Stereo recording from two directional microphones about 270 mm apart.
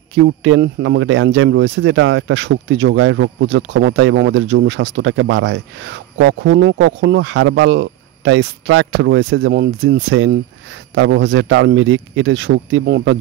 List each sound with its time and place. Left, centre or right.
0.1 s speech: right